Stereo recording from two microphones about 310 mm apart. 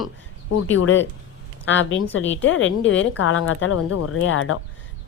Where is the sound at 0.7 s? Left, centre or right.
Left.